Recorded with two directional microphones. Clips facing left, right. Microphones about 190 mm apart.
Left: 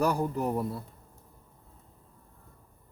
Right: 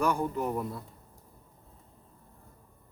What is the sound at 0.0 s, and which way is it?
Speech, 35° left (ahead or behind).